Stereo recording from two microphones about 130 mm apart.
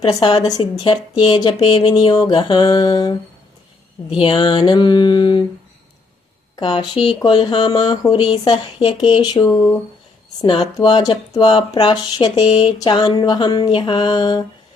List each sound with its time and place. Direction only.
0.2 s speech: 40° left (ahead or behind)
6.6 s speech: 40° left (ahead or behind)
10.8 s speech: 30° left (ahead or behind)